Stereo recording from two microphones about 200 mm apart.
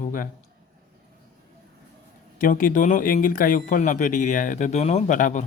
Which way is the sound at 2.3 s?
45° left (ahead or behind).